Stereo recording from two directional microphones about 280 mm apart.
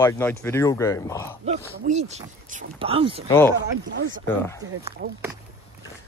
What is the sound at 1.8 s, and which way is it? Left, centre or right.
Speech, right.